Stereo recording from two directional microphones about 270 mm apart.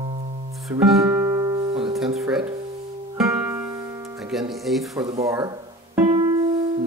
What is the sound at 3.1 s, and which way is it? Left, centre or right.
Music, centre.